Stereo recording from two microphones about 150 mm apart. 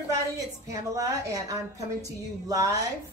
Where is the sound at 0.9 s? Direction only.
25° right (ahead or behind).